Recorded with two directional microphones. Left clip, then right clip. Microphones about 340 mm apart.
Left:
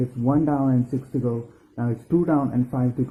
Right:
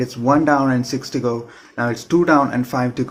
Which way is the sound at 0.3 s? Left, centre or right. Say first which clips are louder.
Right 7 dB; centre.